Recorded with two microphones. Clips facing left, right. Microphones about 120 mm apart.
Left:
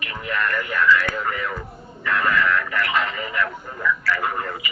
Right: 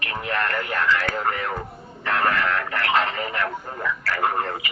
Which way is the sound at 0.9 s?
45° right (ahead or behind).